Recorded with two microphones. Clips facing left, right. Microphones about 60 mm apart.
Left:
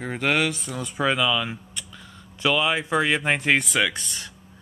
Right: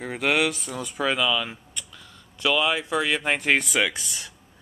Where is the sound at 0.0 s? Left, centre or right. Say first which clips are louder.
Even; centre; by 3.3 s left.